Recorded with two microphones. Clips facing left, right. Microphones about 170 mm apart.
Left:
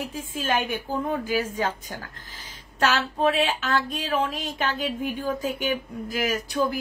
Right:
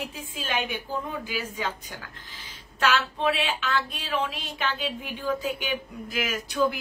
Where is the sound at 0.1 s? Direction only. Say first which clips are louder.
Left 5 dB; 45° left (ahead or behind).